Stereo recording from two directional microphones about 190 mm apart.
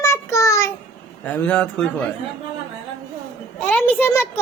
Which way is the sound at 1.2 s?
5° left (ahead or behind).